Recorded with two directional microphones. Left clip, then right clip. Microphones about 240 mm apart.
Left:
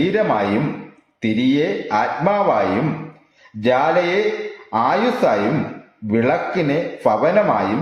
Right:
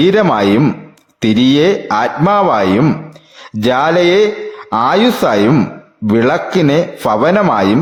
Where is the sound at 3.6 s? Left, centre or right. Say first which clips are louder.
Right 5 dB; right.